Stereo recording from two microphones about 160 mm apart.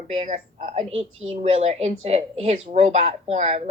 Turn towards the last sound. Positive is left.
turn(degrees=-45)  # may be behind; listen again after turning